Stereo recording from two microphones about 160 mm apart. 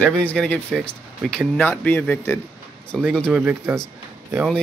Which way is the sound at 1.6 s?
10° left (ahead or behind).